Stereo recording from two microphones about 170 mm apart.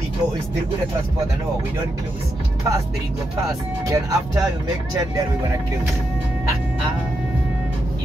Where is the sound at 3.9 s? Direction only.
20° right (ahead or behind).